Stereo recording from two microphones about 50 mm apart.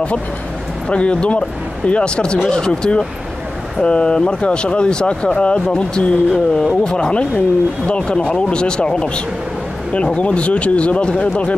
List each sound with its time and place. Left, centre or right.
0.8 s speech: left